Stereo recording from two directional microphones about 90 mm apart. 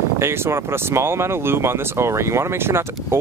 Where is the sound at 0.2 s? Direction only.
30° right (ahead or behind).